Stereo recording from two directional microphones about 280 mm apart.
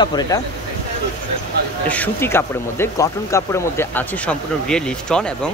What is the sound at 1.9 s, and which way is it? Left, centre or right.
Speech, centre.